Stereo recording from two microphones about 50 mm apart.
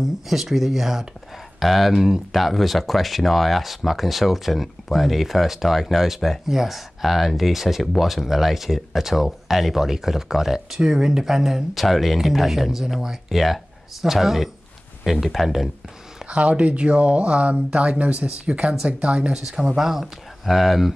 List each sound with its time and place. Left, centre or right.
0.0 s speech: centre
16.3 s speech: right
19.3 s speech: centre